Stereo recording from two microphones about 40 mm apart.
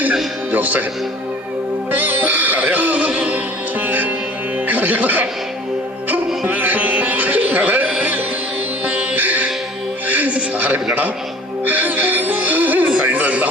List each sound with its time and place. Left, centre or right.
0.5 s speech: right
2.0 s music: right
3.0 s music: right
3.8 s music: right
6.5 s music: right
9.1 s music: right